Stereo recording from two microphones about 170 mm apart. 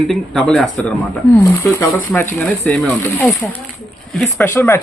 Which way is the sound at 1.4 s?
15° left (ahead or behind).